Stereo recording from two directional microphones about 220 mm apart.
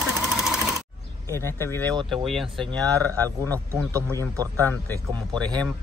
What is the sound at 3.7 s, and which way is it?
Speech, 15° right (ahead or behind).